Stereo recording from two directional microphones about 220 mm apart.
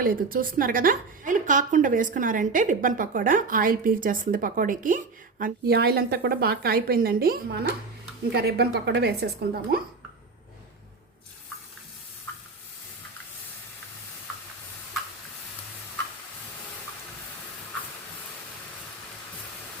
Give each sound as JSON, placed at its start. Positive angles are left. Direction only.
{"t": 0.0, "sound": "a woman's voice", "side_deg": -40}